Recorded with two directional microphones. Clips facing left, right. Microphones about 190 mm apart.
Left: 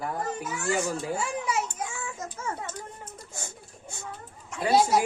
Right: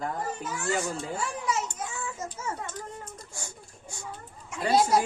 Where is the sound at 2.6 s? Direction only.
5° left (ahead or behind).